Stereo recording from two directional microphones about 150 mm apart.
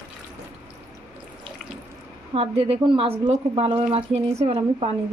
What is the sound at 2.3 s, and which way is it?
A woman's voice, 40° right (ahead or behind).